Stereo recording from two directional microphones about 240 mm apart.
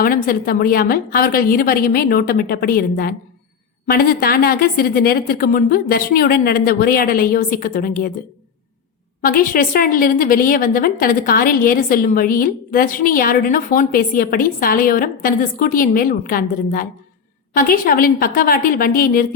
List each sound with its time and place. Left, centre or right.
0.0 s a woman's voice: left
9.2 s a woman's voice: left